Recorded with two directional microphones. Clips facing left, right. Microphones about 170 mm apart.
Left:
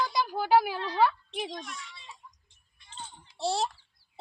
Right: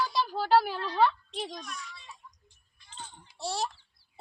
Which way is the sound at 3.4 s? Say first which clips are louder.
Left 5 dB; 25° left (ahead or behind).